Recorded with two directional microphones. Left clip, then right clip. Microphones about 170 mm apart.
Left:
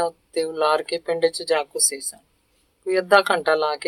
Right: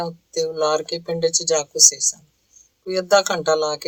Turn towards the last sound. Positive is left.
turn(degrees=-45)  # may be behind; listen again after turning